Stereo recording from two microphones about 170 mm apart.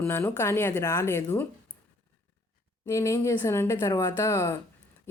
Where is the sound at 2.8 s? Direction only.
20° left (ahead or behind).